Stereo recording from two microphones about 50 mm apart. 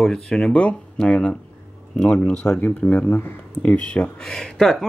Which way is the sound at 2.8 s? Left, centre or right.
Left.